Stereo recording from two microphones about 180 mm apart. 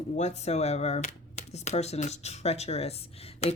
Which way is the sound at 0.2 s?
40° left (ahead or behind).